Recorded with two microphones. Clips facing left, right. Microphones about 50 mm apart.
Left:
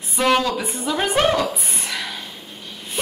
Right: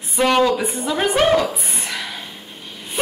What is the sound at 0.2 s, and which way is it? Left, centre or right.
A woman's voice, centre.